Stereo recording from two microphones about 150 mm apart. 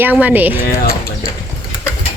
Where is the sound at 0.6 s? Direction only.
85° left.